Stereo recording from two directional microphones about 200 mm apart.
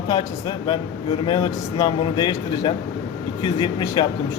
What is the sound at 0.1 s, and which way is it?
A man's voice, 20° left (ahead or behind).